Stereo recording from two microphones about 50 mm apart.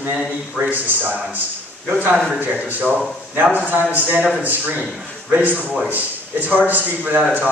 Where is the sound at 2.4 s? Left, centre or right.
Right.